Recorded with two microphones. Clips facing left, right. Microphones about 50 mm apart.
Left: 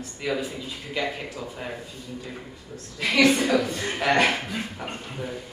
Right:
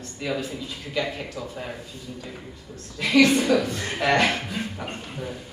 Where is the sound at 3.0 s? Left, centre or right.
Left.